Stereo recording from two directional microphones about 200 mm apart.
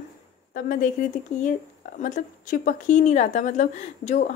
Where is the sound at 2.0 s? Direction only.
40° left (ahead or behind).